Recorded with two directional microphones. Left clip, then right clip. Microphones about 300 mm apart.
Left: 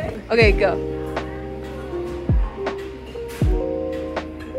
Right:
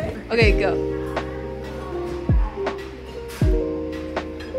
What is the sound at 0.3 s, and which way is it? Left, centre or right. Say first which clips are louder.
Speech: left 3 dB; centre.